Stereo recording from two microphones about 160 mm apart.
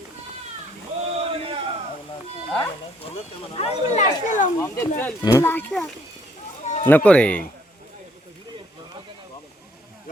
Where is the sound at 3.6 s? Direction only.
40° left (ahead or behind).